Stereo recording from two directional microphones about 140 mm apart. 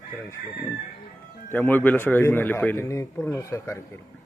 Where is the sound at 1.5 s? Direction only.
15° left (ahead or behind).